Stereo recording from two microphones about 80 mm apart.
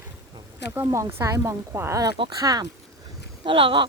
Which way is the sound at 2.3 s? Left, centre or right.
Right.